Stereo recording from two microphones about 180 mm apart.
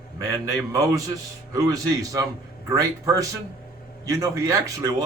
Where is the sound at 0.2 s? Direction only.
20° right (ahead or behind).